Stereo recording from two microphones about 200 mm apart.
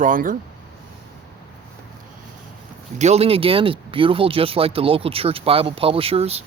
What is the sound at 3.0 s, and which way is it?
Speech, 30° right (ahead or behind).